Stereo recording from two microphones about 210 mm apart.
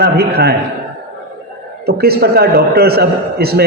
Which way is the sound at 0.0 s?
50° right (ahead or behind).